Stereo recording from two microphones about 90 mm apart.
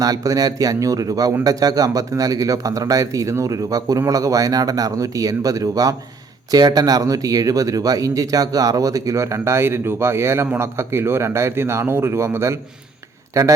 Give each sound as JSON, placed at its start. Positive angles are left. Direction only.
{"t": 0.0, "sound": "speech", "side_deg": -40}